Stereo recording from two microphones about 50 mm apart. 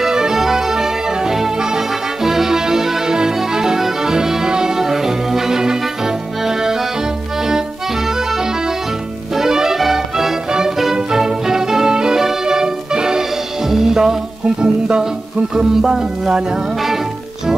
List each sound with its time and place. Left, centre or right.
0.0 s music: centre
9.3 s music: centre